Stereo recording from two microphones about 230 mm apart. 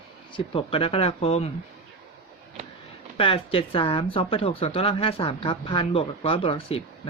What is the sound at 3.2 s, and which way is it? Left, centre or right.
Speech, left.